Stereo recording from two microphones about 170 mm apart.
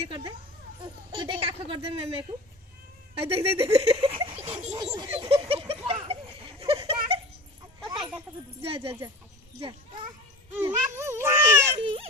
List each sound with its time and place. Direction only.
0.1 s a woman's voice: 30° right (ahead or behind)
4.7 s speech: 25° right (ahead or behind)
5.2 s a sound: 35° right (ahead or behind)
8.6 s speech: 35° right (ahead or behind)
10.5 s speech: 15° right (ahead or behind)
11.8 s speech: 30° right (ahead or behind)